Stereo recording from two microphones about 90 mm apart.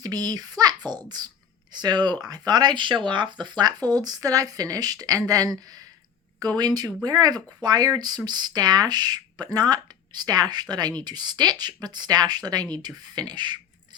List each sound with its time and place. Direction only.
0.0 s speech: 45° right (ahead or behind)